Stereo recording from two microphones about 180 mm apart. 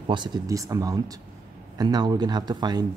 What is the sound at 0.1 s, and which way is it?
Speech, 25° right (ahead or behind).